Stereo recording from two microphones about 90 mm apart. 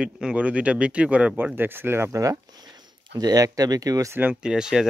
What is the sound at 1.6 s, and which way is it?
Speech, 25° right (ahead or behind).